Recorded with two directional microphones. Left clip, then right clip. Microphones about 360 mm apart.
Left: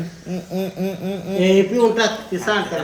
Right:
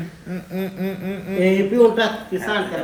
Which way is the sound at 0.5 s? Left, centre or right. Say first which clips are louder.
Left 2 dB; centre.